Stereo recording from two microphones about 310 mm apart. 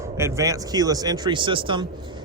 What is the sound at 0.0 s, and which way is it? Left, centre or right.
Speech, centre.